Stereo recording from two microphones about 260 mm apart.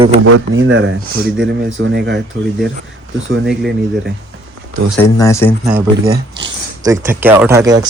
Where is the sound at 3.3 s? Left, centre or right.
Right.